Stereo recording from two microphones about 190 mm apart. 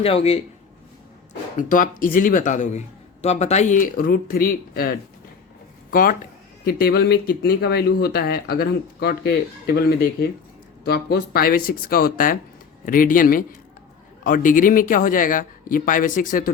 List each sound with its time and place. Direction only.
0.0 s speech: 30° left (ahead or behind)
1.5 s speech: 45° left (ahead or behind)